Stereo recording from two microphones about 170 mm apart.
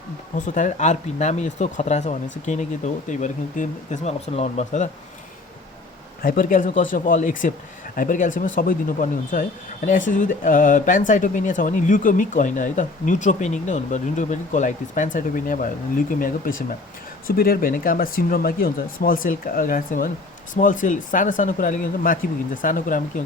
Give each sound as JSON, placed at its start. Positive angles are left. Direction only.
{"t": 0.3, "sound": "speech", "side_deg": 50}
{"t": 6.2, "sound": "speech", "side_deg": 55}